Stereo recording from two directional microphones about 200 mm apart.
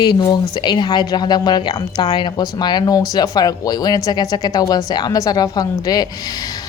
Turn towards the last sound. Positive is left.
turn(degrees=20)  # may be behind; listen again after turning